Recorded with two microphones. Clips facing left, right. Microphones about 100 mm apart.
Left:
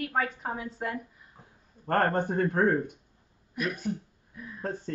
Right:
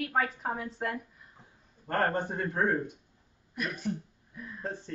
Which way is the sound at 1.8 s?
55° left (ahead or behind).